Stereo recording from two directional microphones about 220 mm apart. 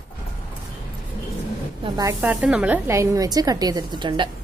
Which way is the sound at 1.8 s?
15° right (ahead or behind).